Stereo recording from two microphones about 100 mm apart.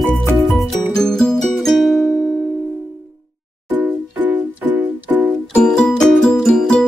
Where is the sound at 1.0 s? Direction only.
5° left (ahead or behind).